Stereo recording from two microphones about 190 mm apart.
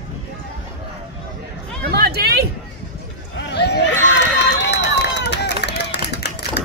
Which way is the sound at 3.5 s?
60° left (ahead or behind).